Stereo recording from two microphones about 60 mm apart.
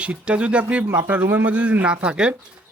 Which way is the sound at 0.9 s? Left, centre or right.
Right.